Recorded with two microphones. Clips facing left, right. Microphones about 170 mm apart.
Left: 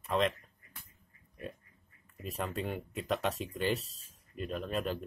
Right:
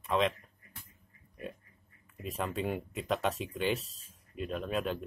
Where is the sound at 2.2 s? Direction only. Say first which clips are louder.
Right 2 dB; centre (ahead or behind).